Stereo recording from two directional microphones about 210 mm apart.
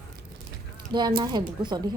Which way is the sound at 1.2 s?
20° right (ahead or behind).